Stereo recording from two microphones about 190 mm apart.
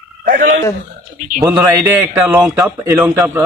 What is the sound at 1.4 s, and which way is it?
A man's voice, 15° right (ahead or behind).